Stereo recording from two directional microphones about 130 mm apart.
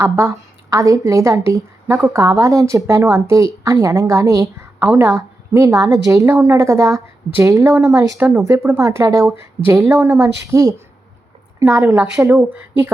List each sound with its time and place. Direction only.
0.0 s a woman's voice: 20° right (ahead or behind)